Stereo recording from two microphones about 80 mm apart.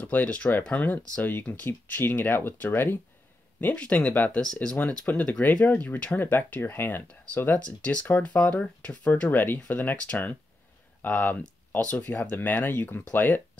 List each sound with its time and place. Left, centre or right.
0.0 s speech: centre
3.6 s speech: centre